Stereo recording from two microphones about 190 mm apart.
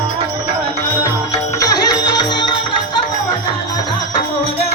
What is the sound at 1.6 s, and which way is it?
Music, 20° left (ahead or behind).